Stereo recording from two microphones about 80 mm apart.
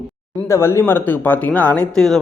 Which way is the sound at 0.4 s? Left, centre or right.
Left.